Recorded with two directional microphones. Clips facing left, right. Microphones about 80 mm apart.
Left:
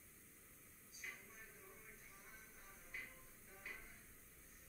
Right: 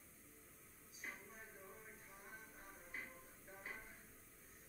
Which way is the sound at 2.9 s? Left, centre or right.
Right.